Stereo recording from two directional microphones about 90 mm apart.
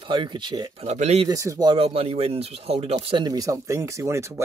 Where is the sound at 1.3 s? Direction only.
40° right (ahead or behind).